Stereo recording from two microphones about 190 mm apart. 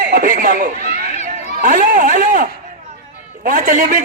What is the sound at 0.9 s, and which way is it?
Chatter, 35° left (ahead or behind).